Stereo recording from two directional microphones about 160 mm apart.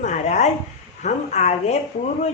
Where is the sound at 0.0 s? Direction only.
45° left (ahead or behind).